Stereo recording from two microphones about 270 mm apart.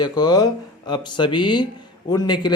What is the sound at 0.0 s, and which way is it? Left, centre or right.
Speech, centre.